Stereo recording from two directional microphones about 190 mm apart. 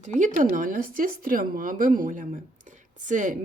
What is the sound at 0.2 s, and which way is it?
Speech, 45° right (ahead or behind).